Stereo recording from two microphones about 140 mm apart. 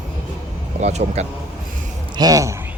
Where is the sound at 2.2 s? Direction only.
25° right (ahead or behind).